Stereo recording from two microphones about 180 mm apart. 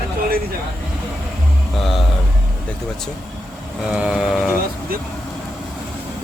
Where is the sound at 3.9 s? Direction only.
5° right (ahead or behind).